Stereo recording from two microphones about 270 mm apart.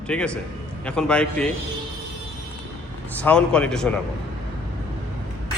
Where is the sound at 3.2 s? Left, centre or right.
Centre.